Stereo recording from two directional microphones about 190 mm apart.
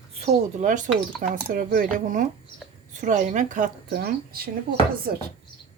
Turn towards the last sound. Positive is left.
turn(degrees=-50)  # may be behind; listen again after turning